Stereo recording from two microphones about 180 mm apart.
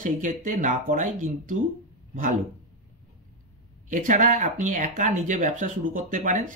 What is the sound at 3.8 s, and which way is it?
Speech, 45° right (ahead or behind).